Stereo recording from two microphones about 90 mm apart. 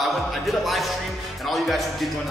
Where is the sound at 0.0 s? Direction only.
Centre (ahead or behind).